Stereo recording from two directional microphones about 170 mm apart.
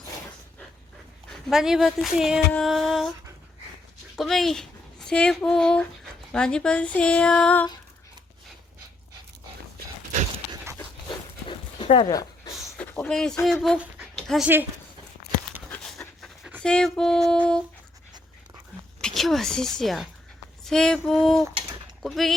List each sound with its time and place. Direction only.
1.3 s speech: centre (ahead or behind)
2.5 s music: centre (ahead or behind)
4.2 s speech: centre (ahead or behind)
11.4 s dog: 30° left (ahead or behind)
12.7 s speech: 10° left (ahead or behind)
15.7 s pant: 5° left (ahead or behind)
16.2 s speech: centre (ahead or behind)
19.0 s speech: centre (ahead or behind)